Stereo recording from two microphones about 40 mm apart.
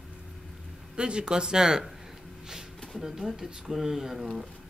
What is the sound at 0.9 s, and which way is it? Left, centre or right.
Speech, right.